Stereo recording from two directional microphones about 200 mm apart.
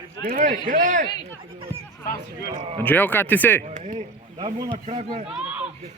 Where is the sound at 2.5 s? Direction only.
30° right (ahead or behind).